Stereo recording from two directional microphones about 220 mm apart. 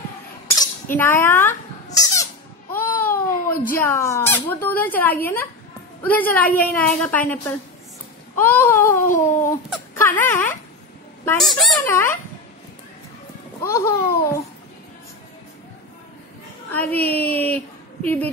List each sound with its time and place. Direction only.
0.9 s speech: 10° left (ahead or behind)
2.0 s a sound: 15° left (ahead or behind)
3.8 s speech: 10° left (ahead or behind)
8.4 s a sound: 10° left (ahead or behind)
11.2 s a woman's voice: centre (ahead or behind)
11.8 s speech: 10° left (ahead or behind)
13.6 s speech: 10° left (ahead or behind)
16.7 s speech: 10° left (ahead or behind)